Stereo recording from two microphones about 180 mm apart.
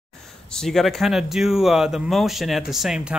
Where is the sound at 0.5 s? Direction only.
Centre (ahead or behind).